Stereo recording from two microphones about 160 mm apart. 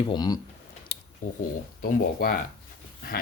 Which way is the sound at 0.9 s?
35° left (ahead or behind).